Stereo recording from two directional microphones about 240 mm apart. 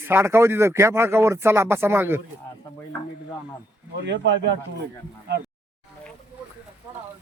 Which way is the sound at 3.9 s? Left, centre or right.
Right.